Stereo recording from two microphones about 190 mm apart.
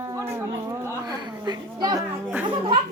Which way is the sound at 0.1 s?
15° right (ahead or behind).